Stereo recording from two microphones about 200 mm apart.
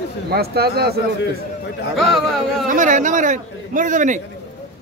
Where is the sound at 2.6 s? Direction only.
40° right (ahead or behind).